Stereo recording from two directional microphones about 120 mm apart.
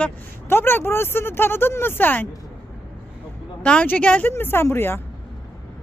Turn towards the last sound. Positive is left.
turn(degrees=20)  # may be behind; listen again after turning